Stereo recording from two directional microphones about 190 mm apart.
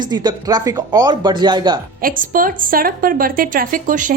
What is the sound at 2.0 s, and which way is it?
A woman's voice, 45° right (ahead or behind).